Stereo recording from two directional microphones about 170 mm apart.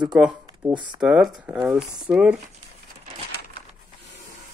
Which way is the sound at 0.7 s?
30° right (ahead or behind).